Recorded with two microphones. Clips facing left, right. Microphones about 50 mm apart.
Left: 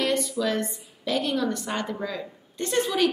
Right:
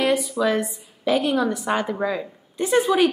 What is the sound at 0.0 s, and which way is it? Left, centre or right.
A woman's voice, centre.